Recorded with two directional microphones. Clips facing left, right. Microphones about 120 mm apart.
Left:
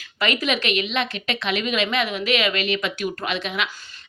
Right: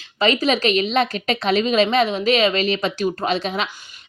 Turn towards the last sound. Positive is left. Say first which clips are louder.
# right 4 dB
turn(degrees=-35)  # may be behind; listen again after turning